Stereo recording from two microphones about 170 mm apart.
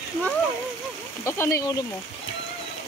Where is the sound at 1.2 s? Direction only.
15° left (ahead or behind).